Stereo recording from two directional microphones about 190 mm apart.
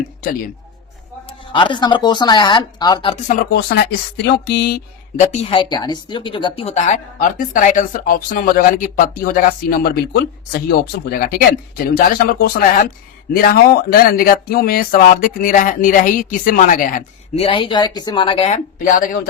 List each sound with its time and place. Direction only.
1.3 s speech: 25° left (ahead or behind)
4.2 s a sound: 60° left (ahead or behind)
5.1 s a woman's voice: 35° left (ahead or behind)